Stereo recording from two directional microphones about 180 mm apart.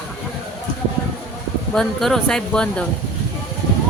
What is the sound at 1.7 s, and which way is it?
Speech, centre (ahead or behind).